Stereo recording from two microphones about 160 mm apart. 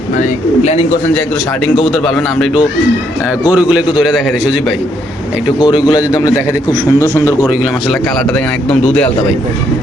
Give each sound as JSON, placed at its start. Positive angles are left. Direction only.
{"t": 0.2, "sound": "speech", "side_deg": 45}
{"t": 1.8, "sound": "a man's voice", "side_deg": 0}
{"t": 3.5, "sound": "a man's voice", "side_deg": -10}
{"t": 5.5, "sound": "a man's voice", "side_deg": 30}